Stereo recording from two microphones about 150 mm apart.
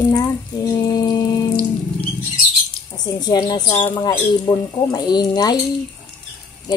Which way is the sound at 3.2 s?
30° left (ahead or behind).